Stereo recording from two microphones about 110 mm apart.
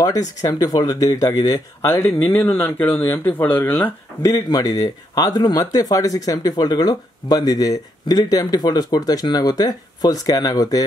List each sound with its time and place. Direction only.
0.0 s speech: 35° left (ahead or behind)
2.0 s speech: 15° left (ahead or behind)
4.2 s speech: 35° left (ahead or behind)